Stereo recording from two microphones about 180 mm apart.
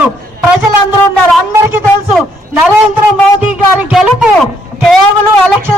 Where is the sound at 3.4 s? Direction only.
5° right (ahead or behind).